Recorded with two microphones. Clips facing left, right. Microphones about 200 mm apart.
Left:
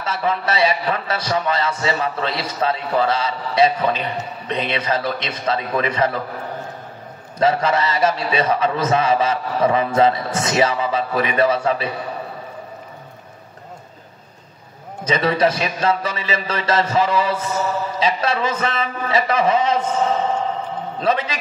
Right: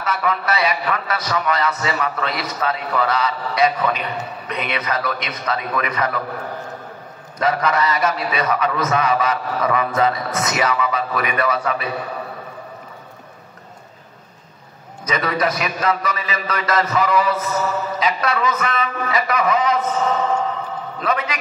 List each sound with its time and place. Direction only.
0.0 s a man's voice: 30° left (ahead or behind)
7.3 s a man's voice: 30° left (ahead or behind)
15.0 s a man's voice: 30° left (ahead or behind)